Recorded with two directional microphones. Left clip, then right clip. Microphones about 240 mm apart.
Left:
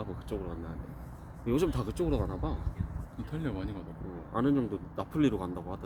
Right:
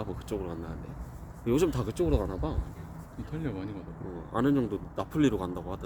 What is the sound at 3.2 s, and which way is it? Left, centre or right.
Speech, centre.